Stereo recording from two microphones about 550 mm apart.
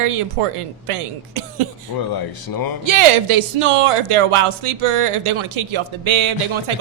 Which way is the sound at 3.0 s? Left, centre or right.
Right.